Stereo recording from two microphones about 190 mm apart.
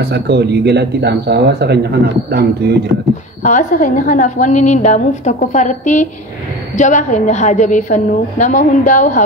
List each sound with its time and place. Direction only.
0.0 s speech: 60° right (ahead or behind)
3.4 s a woman's voice: 45° left (ahead or behind)